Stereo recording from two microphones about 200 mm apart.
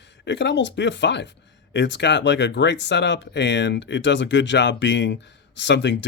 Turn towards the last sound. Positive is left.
turn(degrees=60)  # may be behind; listen again after turning